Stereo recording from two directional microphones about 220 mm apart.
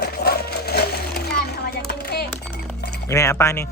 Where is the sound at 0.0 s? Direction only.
45° left (ahead or behind).